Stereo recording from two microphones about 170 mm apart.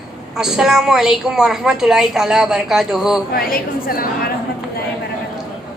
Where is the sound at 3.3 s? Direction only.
60° left (ahead or behind).